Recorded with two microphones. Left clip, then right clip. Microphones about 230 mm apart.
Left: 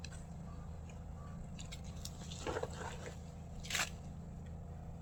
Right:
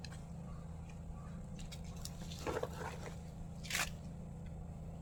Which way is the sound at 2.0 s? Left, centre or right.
Centre.